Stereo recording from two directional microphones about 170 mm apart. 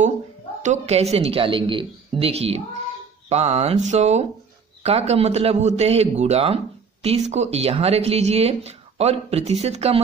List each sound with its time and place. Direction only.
0.6 s a man's voice: 40° right (ahead or behind)